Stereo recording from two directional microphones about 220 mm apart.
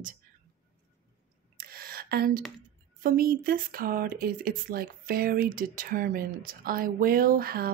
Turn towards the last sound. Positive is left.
turn(degrees=-40)  # may be behind; listen again after turning